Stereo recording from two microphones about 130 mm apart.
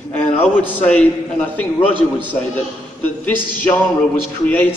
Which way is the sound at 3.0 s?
10° left (ahead or behind).